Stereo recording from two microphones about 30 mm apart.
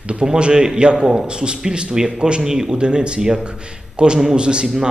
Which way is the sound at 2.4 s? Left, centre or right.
Centre.